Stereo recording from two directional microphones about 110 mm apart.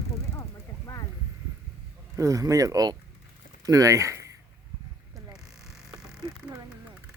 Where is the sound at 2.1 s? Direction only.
30° right (ahead or behind).